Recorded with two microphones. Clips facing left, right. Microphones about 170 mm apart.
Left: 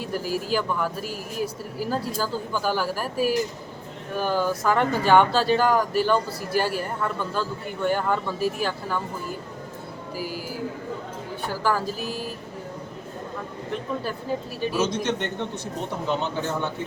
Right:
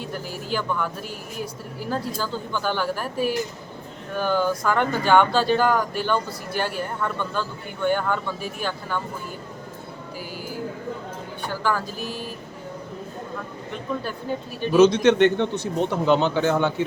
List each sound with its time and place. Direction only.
0.0 s speech: 5° left (ahead or behind)
11.4 s speech: 5° left (ahead or behind)
14.7 s a man's voice: 70° right (ahead or behind)